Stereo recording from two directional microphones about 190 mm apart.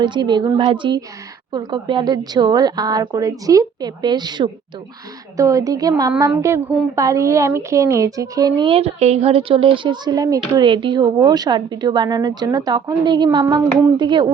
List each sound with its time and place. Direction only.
0.0 s a woman's voice: 25° right (ahead or behind)